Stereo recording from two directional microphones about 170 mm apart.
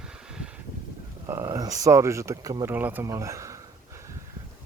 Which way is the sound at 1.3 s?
20° right (ahead or behind).